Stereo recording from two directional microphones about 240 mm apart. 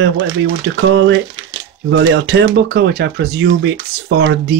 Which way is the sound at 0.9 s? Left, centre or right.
Right.